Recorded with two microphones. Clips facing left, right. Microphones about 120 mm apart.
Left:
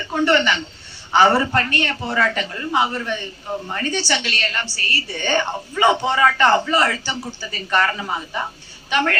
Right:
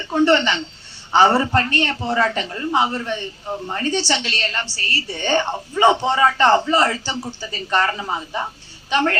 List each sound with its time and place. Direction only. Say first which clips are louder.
0.0 s a woman's voice: right 2 dB; 30° right (ahead or behind)